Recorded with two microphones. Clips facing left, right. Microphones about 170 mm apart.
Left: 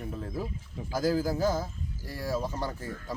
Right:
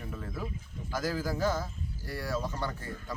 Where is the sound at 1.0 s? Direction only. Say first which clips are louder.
Left 5 dB; 30° left (ahead or behind).